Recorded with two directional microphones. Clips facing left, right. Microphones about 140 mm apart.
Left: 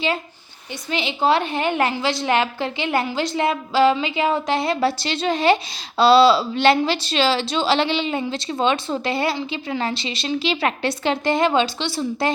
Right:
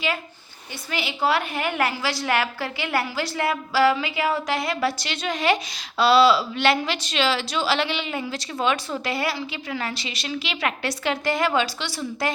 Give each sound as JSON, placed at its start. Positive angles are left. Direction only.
{"t": 0.9, "sound": "a woman's voice", "side_deg": 25}